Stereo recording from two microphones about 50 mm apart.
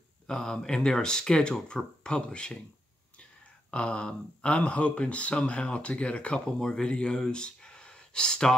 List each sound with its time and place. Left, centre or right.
0.3 s speech: centre
3.7 s speech: left